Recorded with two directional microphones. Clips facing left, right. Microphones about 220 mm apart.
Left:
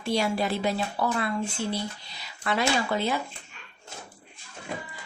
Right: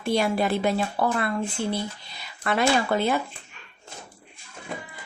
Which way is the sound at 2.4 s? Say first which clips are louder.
Right 3 dB; 55° right (ahead or behind).